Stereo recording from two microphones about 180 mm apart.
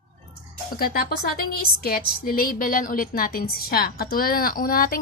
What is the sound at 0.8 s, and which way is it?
A woman's voice, 55° left (ahead or behind).